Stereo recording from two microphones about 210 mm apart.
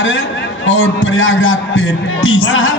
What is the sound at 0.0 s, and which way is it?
A man's voice, 65° left (ahead or behind).